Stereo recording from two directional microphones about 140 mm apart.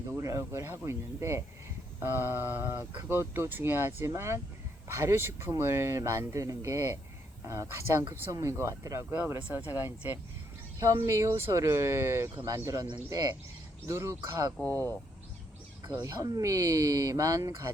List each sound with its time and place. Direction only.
0.1 s speech: 20° right (ahead or behind)
15.9 s speech: 20° right (ahead or behind)